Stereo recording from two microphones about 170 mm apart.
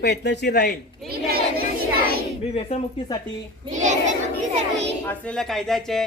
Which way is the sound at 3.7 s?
45° right (ahead or behind).